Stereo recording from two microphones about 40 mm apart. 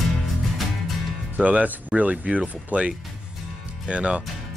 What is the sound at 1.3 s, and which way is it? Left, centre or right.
Speech, right.